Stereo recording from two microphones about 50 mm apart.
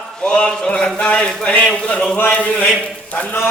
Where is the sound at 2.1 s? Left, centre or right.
Left.